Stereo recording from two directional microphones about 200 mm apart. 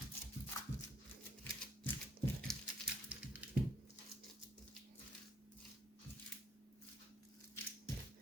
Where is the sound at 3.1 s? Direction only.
5° right (ahead or behind).